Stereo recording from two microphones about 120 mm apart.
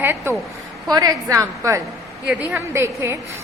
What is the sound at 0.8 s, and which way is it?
Speech, 30° right (ahead or behind).